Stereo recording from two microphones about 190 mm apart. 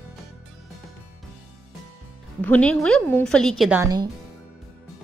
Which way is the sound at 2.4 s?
5° left (ahead or behind).